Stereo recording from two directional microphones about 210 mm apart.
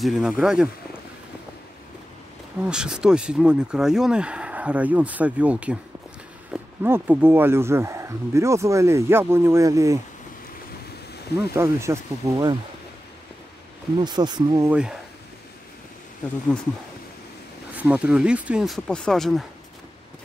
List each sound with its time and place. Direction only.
0.0 s speech: centre (ahead or behind)
2.6 s speech: 5° right (ahead or behind)
11.5 s speech: 15° right (ahead or behind)
13.9 s speech: 20° right (ahead or behind)
14.7 s speech: 5° right (ahead or behind)
17.7 s speech: 5° right (ahead or behind)